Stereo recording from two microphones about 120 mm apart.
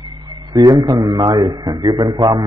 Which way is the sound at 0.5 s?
35° right (ahead or behind).